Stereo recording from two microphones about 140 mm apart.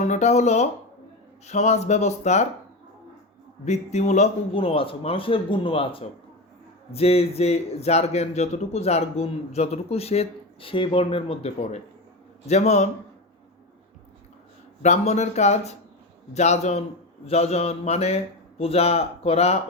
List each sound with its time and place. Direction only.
0.0 s a man's voice: 55° left (ahead or behind)
3.7 s a man's voice: 55° left (ahead or behind)
4.5 s a man's voice: 40° left (ahead or behind)
12.5 s a man's voice: 55° left (ahead or behind)
14.8 s a man's voice: 55° left (ahead or behind)